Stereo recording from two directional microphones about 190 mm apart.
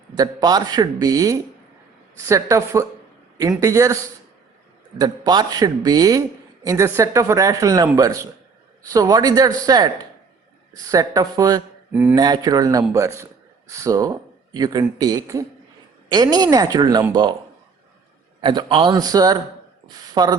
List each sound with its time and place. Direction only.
0.2 s a woman's voice: 20° right (ahead or behind)
18.3 s speech: 25° right (ahead or behind)